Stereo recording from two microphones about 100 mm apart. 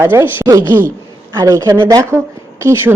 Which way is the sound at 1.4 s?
35° right (ahead or behind).